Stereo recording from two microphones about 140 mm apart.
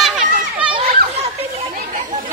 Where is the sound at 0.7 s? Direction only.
45° right (ahead or behind).